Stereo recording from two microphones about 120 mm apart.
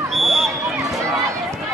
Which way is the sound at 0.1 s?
Centre (ahead or behind).